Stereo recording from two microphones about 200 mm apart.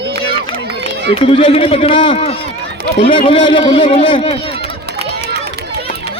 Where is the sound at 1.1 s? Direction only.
30° left (ahead or behind).